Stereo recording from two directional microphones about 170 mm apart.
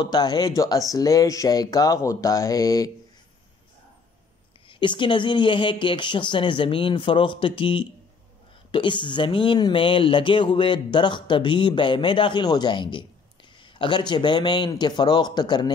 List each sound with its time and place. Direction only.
0.0 s speech: 25° left (ahead or behind)
4.6 s speech: 30° left (ahead or behind)